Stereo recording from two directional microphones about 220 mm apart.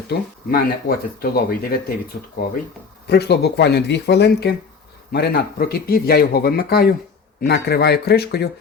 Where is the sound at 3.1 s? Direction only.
50° left (ahead or behind).